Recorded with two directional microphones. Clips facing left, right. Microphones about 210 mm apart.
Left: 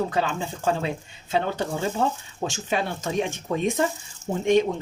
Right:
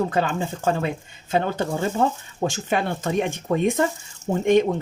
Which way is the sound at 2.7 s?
55° right (ahead or behind).